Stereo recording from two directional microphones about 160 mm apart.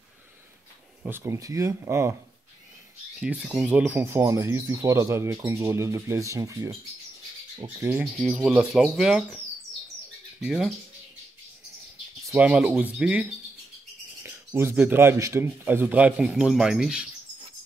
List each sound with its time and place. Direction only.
1.0 s speech: 15° right (ahead or behind)
3.2 s speech: 5° right (ahead or behind); by 7.9 s 25° right (ahead or behind)
8.0 s speech: 5° left (ahead or behind)
10.4 s speech: 5° right (ahead or behind)
12.4 s speech: 10° right (ahead or behind)